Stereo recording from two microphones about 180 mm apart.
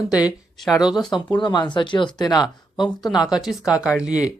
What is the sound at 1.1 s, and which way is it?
Speech, 25° left (ahead or behind).